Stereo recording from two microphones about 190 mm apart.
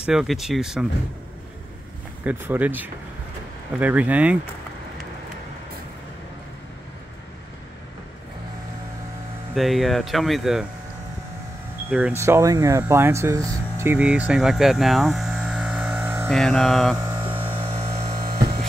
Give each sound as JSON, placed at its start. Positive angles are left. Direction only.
{"t": 0.0, "sound": "speech", "side_deg": -5}
{"t": 2.2, "sound": "speech", "side_deg": -10}
{"t": 9.6, "sound": "speech", "side_deg": 0}
{"t": 11.9, "sound": "speech", "side_deg": -10}
{"t": 16.3, "sound": "speech", "side_deg": 0}
{"t": 17.0, "sound": "mains hum", "side_deg": -25}
{"t": 17.6, "sound": "a sound", "side_deg": -30}
{"t": 18.1, "sound": "hum", "side_deg": -50}